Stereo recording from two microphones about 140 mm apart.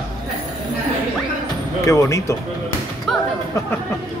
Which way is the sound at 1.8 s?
20° left (ahead or behind).